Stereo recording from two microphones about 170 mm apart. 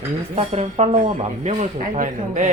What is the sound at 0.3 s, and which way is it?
Speech, 40° right (ahead or behind).